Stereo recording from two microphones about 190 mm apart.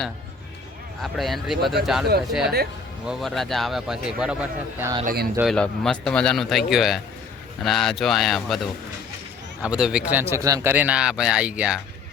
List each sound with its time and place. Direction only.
1.2 s a man's voice: centre (ahead or behind)
3.1 s a man's voice: centre (ahead or behind)
5.0 s speech: 55° right (ahead or behind)
5.4 s a man's voice: centre (ahead or behind)